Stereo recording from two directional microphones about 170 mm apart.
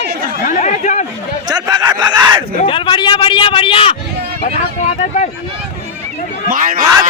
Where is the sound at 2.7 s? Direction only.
25° left (ahead or behind).